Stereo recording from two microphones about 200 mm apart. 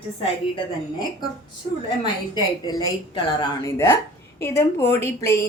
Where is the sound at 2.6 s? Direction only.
20° left (ahead or behind).